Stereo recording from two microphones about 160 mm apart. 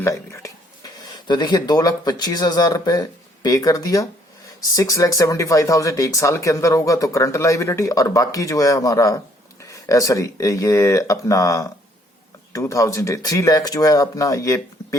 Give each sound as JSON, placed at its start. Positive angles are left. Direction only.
{"t": 0.0, "sound": "speech", "side_deg": 20}